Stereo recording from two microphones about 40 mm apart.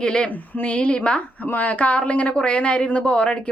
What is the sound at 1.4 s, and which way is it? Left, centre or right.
Speech, left.